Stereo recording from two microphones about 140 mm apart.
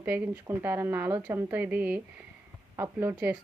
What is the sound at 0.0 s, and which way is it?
A woman's voice, 10° right (ahead or behind).